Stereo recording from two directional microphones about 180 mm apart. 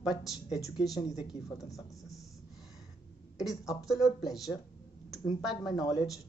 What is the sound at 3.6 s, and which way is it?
Speech, 20° left (ahead or behind).